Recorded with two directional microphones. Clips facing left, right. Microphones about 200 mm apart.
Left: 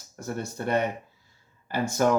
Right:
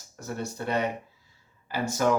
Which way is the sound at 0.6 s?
50° left (ahead or behind).